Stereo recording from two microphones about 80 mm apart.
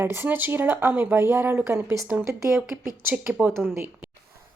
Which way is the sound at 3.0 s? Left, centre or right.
Right.